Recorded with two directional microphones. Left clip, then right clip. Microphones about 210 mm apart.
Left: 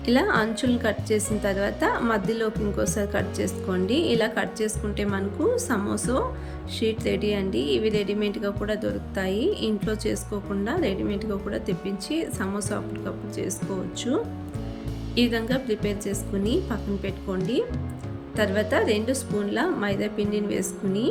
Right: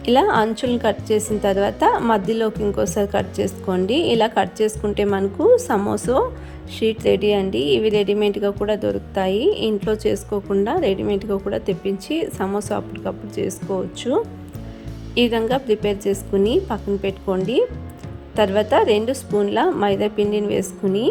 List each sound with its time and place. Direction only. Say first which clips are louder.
0.0 s speech: right 6 dB; 30° right (ahead or behind)
15.1 s speech: right 6 dB; 25° right (ahead or behind)
18.3 s speech: right 7 dB; 25° right (ahead or behind)